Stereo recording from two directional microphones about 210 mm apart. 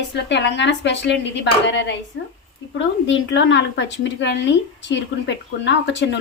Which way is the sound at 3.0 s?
60° left (ahead or behind).